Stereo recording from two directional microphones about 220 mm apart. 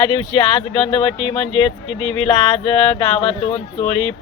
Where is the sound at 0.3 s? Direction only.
25° left (ahead or behind).